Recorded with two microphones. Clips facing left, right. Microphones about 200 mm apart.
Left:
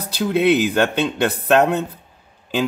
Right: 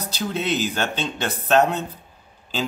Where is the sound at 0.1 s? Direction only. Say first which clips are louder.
Left 9 dB; 60° left (ahead or behind).